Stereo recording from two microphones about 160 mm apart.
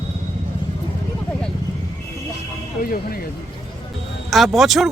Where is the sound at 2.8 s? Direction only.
70° left (ahead or behind).